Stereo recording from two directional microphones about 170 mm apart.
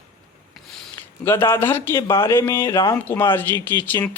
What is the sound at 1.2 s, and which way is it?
Speech, 15° left (ahead or behind).